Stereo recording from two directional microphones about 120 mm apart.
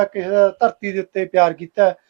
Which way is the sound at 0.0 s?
25° right (ahead or behind).